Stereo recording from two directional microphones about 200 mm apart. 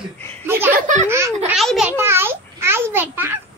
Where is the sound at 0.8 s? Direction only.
40° right (ahead or behind).